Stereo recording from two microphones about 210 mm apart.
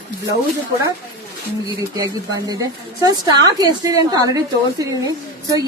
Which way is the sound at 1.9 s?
15° right (ahead or behind).